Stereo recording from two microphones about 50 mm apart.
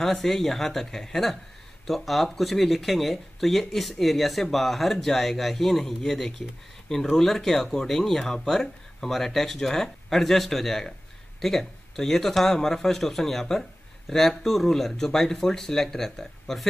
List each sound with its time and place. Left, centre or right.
0.0 s a man's voice: centre